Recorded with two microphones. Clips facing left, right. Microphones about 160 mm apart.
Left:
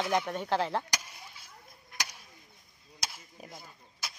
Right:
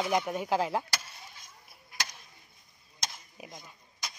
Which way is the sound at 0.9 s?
15° left (ahead or behind).